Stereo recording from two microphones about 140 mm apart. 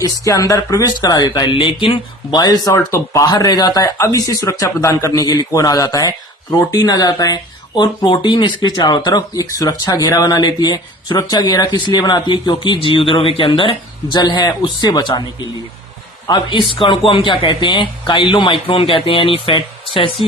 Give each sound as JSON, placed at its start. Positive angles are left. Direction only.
{"t": 0.0, "sound": "speech", "side_deg": 25}
{"t": 16.2, "sound": "a man's voice", "side_deg": 30}